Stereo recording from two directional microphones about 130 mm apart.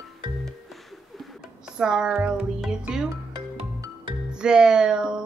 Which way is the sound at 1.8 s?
5° right (ahead or behind).